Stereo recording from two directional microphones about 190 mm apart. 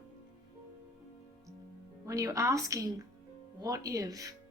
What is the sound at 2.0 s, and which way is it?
A woman's voice, 15° right (ahead or behind).